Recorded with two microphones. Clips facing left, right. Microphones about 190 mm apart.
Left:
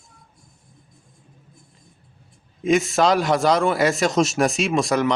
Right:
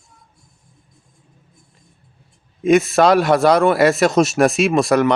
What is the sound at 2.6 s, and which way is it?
A man's voice, 60° right (ahead or behind).